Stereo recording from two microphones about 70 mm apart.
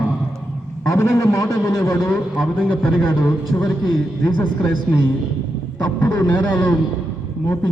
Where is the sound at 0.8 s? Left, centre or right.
Left.